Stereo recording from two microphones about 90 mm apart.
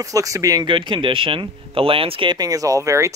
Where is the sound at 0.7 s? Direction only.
65° right (ahead or behind).